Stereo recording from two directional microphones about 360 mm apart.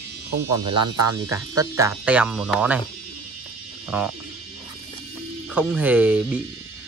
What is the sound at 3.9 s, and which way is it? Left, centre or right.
Speech, centre.